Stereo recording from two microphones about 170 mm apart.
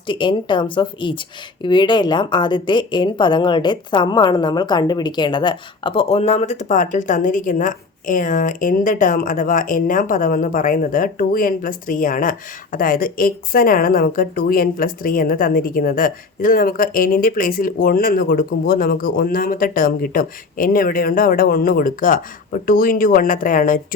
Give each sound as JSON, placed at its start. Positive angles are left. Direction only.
{"t": 0.1, "sound": "a woman's voice", "side_deg": 30}